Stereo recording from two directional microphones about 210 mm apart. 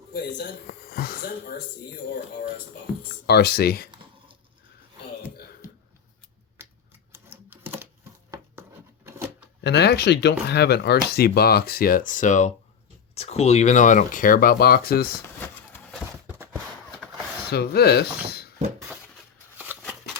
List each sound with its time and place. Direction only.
0.1 s speech: 45° left (ahead or behind)
3.2 s speech: 50° left (ahead or behind)
7.1 s typewriter: 10° right (ahead or behind)
9.6 s speech: 55° left (ahead or behind)
16.2 s a sound: 10° right (ahead or behind)
17.5 s speech: 50° left (ahead or behind)
19.7 s shuffling cards: 10° right (ahead or behind)